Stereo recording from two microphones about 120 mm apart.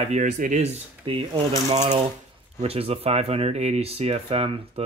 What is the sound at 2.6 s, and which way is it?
Speech, 55° right (ahead or behind).